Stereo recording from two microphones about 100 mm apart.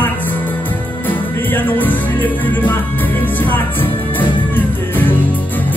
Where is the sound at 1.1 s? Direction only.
20° left (ahead or behind).